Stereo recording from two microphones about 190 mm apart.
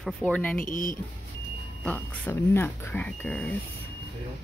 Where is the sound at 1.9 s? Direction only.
10° left (ahead or behind).